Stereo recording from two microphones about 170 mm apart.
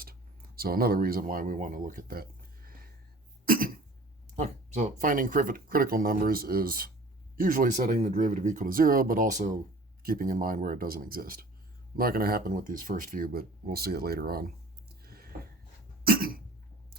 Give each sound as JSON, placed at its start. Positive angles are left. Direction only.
{"t": 0.0, "sound": "speech", "side_deg": -60}
{"t": 3.4, "sound": "cough", "side_deg": -55}
{"t": 4.4, "sound": "speech", "side_deg": -40}
{"t": 10.0, "sound": "speech", "side_deg": -60}
{"t": 15.0, "sound": "a sound", "side_deg": -60}
{"t": 16.0, "sound": "cough", "side_deg": -60}